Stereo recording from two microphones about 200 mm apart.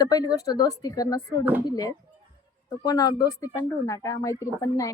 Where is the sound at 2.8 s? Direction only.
20° left (ahead or behind).